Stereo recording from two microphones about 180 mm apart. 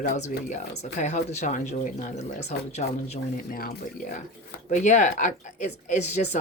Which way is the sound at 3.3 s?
55° left (ahead or behind).